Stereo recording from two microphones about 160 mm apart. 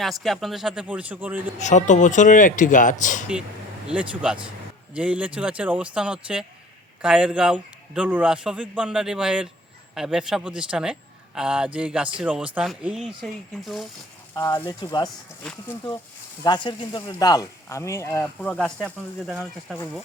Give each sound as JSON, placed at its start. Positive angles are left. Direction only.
{"t": 0.0, "sound": "a man's voice", "side_deg": 0}
{"t": 1.5, "sound": "speech", "side_deg": 50}
{"t": 3.8, "sound": "a man's voice", "side_deg": -5}
{"t": 14.3, "sound": "speech", "side_deg": 25}
{"t": 16.4, "sound": "speech", "side_deg": 30}
{"t": 18.3, "sound": "a man's voice", "side_deg": 5}